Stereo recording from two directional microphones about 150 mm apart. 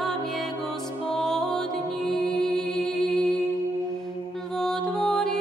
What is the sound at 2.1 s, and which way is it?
Music, 5° left (ahead or behind).